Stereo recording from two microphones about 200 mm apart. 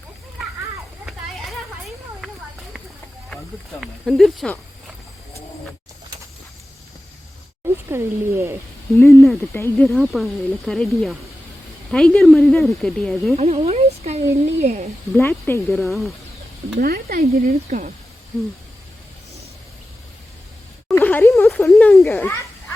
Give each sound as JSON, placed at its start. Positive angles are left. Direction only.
{"t": 3.8, "sound": "speech", "side_deg": 0}
{"t": 7.9, "sound": "speech", "side_deg": -10}
{"t": 9.0, "sound": "speech", "side_deg": 10}
{"t": 13.3, "sound": "speech", "side_deg": -30}
{"t": 15.1, "sound": "speech", "side_deg": 10}
{"t": 16.8, "sound": "speech", "side_deg": -45}
{"t": 20.9, "sound": "a sound", "side_deg": 10}